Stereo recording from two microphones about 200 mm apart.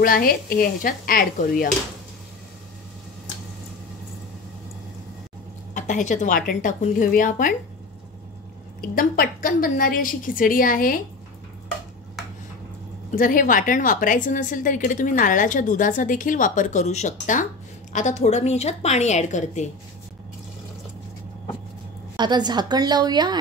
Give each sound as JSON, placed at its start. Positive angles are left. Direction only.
{"t": 0.0, "sound": "a woman's voice", "side_deg": 45}
{"t": 5.8, "sound": "a woman's voice", "side_deg": 40}
{"t": 8.8, "sound": "a woman's voice", "side_deg": 50}
{"t": 13.1, "sound": "a woman's voice", "side_deg": 45}
{"t": 22.1, "sound": "a woman's voice", "side_deg": -20}